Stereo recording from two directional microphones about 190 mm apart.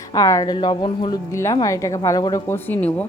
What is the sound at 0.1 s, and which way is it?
A woman's voice, 20° left (ahead or behind).